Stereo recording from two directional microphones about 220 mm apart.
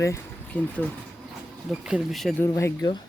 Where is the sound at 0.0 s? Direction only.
10° left (ahead or behind).